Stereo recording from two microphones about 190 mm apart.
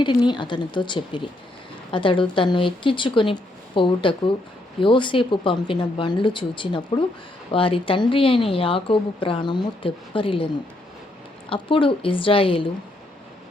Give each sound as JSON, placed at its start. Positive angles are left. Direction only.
{"t": 0.0, "sound": "a woman's voice", "side_deg": 25}